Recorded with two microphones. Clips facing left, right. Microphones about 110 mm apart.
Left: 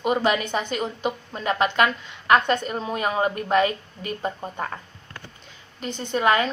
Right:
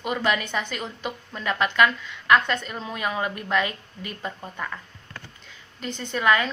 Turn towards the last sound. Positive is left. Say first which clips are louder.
# left 2 dB
turn(degrees=30)  # may be behind; listen again after turning